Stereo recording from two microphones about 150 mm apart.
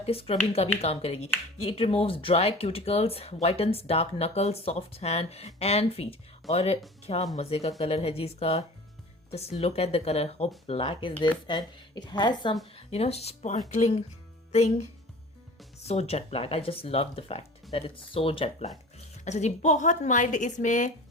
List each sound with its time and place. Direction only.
0.0 s speech: 40° left (ahead or behind)
12.7 s a woman's voice: 45° left (ahead or behind)